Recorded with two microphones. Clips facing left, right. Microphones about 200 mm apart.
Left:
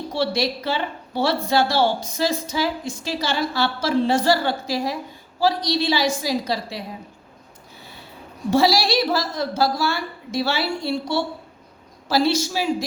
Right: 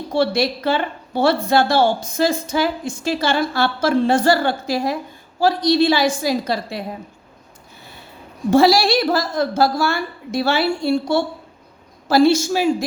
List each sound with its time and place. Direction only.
0.1 s a woman's voice: 50° right (ahead or behind)
8.4 s a woman's voice: 50° right (ahead or behind)